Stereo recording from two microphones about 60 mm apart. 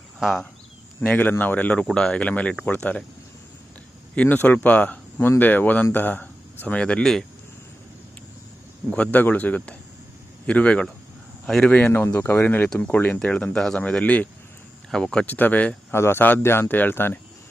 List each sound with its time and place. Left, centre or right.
0.2 s speech: centre
1.0 s speech: left
1.9 s speech: centre
2.2 s speech: left
4.1 s speech: left
6.7 s speech: centre
7.0 s speech: centre
9.1 s speech: left
11.9 s speech: left
14.8 s speech: centre
15.3 s speech: left
15.9 s speech: left